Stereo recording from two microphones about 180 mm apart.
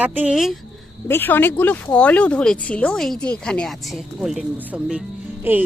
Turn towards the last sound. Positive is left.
turn(degrees=-10)  # may be behind; listen again after turning